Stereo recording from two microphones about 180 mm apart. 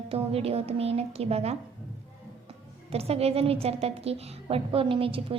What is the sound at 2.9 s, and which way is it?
A woman's voice, 35° right (ahead or behind).